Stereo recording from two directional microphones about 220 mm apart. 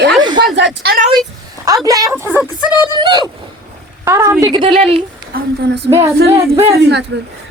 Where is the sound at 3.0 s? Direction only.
20° right (ahead or behind).